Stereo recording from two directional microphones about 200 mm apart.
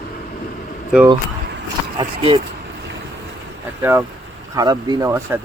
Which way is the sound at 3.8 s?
10° right (ahead or behind).